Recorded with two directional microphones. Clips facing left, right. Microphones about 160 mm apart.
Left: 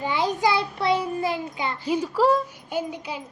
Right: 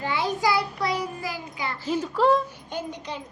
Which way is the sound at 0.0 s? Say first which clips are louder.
Left 2 dB; 20° left (ahead or behind).